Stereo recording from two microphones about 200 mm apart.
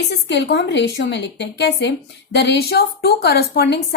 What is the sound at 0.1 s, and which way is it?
A woman's voice, 60° left (ahead or behind).